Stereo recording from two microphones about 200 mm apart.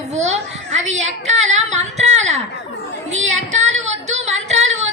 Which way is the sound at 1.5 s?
35° right (ahead or behind).